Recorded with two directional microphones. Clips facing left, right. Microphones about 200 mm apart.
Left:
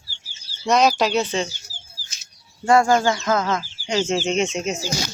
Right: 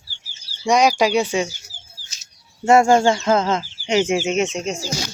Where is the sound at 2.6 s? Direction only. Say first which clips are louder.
Right 3 dB; 25° right (ahead or behind); by 4.9 s 5° left (ahead or behind).